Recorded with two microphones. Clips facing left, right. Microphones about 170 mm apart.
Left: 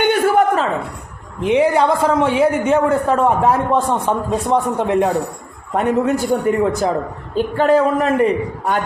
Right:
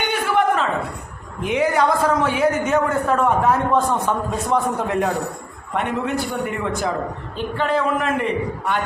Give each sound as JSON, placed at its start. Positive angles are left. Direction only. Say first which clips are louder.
{"t": 0.1, "sound": "a sound", "louder": "left 5 dB", "side_deg": 40}
{"t": 1.4, "sound": "a man's voice", "louder": "left 5 dB", "side_deg": 30}
{"t": 5.7, "sound": "a man's voice", "louder": "left 6 dB", "side_deg": 40}